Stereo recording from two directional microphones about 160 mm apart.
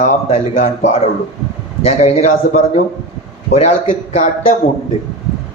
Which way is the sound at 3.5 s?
40° left (ahead or behind).